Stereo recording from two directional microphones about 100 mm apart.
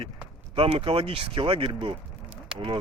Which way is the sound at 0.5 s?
70° right (ahead or behind).